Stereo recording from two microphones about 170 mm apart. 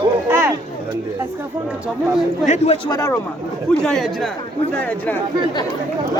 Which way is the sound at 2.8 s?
20° left (ahead or behind).